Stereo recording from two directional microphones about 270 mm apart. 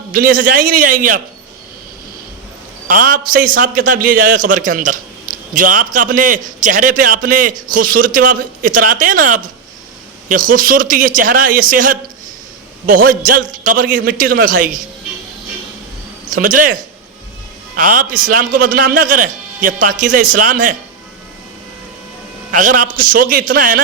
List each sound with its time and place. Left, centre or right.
0.1 s a man's voice: right
2.8 s a man's voice: right
16.3 s a man's voice: right
22.5 s a man's voice: right